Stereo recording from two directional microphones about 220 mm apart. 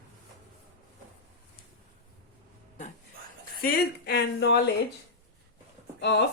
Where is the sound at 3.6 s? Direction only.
45° left (ahead or behind).